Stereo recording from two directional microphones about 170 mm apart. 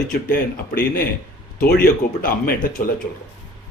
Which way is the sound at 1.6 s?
55° left (ahead or behind).